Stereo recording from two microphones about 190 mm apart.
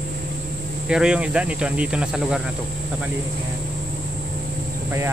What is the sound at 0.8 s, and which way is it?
Speech, 5° right (ahead or behind).